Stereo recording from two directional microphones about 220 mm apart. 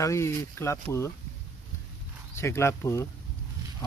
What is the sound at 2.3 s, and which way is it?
Speech, 10° left (ahead or behind).